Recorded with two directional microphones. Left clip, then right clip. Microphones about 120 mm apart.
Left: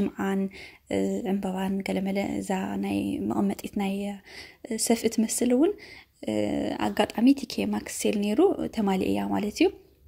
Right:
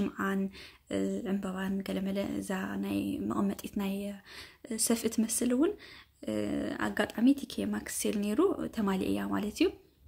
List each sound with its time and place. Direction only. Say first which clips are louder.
0.0 s a woman's voice: left 4 dB; 30° left (ahead or behind)